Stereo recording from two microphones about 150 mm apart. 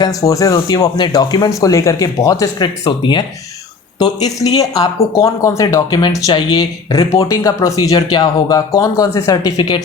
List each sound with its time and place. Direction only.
0.0 s speech: 20° left (ahead or behind)